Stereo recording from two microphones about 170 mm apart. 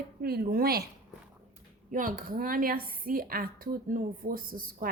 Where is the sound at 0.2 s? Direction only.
65° right (ahead or behind).